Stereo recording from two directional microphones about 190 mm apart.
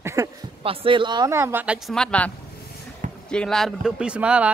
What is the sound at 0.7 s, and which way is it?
Speech, 25° right (ahead or behind).